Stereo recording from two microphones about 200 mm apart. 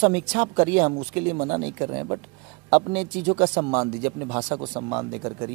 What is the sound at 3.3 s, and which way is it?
Speech, 25° right (ahead or behind).